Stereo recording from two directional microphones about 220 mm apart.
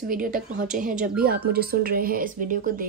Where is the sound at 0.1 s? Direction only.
40° right (ahead or behind).